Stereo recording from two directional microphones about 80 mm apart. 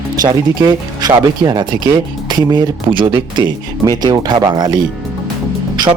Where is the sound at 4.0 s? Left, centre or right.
Right.